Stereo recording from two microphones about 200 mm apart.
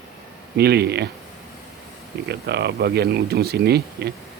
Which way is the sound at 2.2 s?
55° right (ahead or behind).